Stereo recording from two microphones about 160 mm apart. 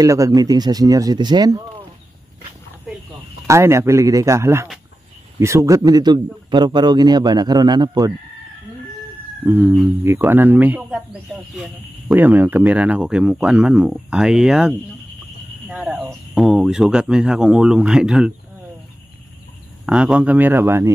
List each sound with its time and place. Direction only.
0.0 s a man's voice: 20° right (ahead or behind)
3.4 s a man's voice: 15° right (ahead or behind)
9.5 s speech: 10° right (ahead or behind)
12.1 s speech: 10° right (ahead or behind)
19.9 s speech: 5° right (ahead or behind)